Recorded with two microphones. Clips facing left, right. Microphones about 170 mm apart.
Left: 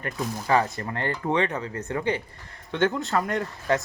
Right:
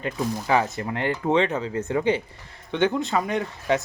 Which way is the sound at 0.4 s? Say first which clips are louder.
Left 1 dB; 10° right (ahead or behind).